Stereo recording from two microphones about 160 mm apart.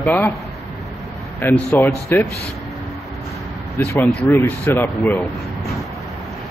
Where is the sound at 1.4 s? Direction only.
15° left (ahead or behind).